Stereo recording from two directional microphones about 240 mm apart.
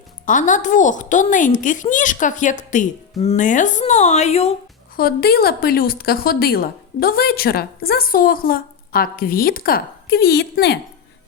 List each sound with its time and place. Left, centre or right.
0.3 s a woman's voice: left
4.9 s a woman's voice: left